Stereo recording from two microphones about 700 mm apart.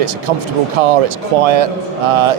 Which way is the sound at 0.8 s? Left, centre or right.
Right.